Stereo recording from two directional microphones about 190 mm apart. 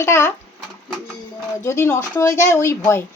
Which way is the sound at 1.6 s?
15° left (ahead or behind).